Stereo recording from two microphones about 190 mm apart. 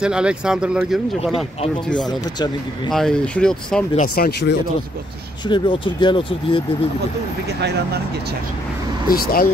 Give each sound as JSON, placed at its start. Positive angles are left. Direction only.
{"t": 0.0, "sound": "speech", "side_deg": -5}
{"t": 2.0, "sound": "speech", "side_deg": 20}
{"t": 2.9, "sound": "speech", "side_deg": 5}
{"t": 3.9, "sound": "speech", "side_deg": 45}
{"t": 5.5, "sound": "speech", "side_deg": 25}
{"t": 9.1, "sound": "speech", "side_deg": 50}